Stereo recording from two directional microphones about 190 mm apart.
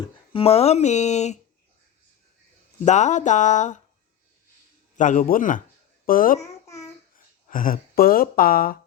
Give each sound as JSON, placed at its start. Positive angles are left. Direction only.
{"t": 0.0, "sound": "speech", "side_deg": 30}
{"t": 2.8, "sound": "speech", "side_deg": 40}
{"t": 4.9, "sound": "speech", "side_deg": 45}
{"t": 6.4, "sound": "babbling", "side_deg": 15}
{"t": 7.4, "sound": "speech", "side_deg": 45}